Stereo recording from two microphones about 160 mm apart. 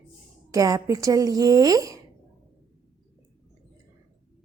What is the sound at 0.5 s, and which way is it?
A woman's voice, 20° right (ahead or behind).